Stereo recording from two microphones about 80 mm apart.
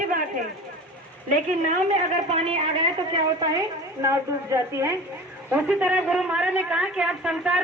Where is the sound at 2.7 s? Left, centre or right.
Right.